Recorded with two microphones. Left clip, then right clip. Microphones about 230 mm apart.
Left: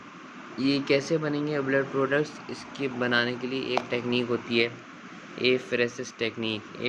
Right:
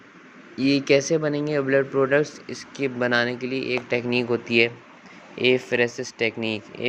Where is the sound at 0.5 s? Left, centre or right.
Right.